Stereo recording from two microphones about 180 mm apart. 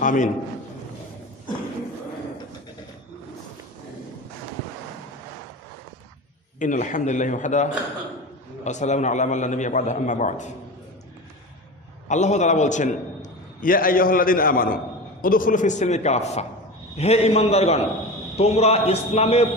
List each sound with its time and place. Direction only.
0.0 s a man's voice: 45° left (ahead or behind)
6.6 s a man's voice: 45° left (ahead or behind)
12.0 s a man's voice: 40° left (ahead or behind)